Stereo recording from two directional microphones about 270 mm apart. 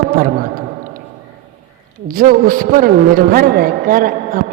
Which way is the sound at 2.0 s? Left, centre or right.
Right.